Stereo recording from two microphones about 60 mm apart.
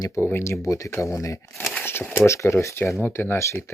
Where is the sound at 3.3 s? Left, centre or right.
Left.